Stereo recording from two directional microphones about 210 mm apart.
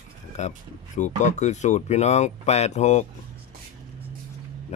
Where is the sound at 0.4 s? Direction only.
35° left (ahead or behind).